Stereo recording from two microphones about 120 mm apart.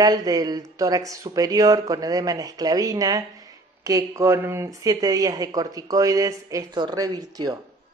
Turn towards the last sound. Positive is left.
turn(degrees=-35)  # may be behind; listen again after turning